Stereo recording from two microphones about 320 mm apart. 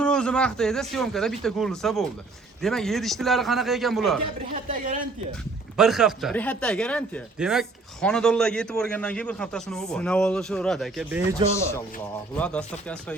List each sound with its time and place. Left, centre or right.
0.0 s speech: centre
4.5 s speech: right
5.7 s speech: centre
12.4 s speech: centre